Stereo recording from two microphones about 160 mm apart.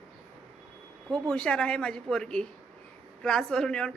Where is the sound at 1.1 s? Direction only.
5° left (ahead or behind).